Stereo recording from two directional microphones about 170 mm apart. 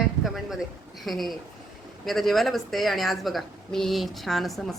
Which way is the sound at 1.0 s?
Centre (ahead or behind).